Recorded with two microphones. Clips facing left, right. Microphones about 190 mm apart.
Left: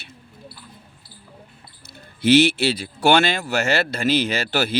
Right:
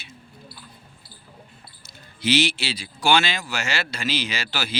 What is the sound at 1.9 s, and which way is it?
Speech, 55° left (ahead or behind).